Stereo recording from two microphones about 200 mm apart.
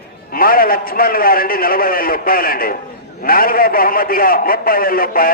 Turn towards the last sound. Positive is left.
turn(degrees=45)  # may be behind; listen again after turning